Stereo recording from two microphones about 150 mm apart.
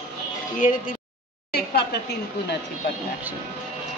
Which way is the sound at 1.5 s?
90° left.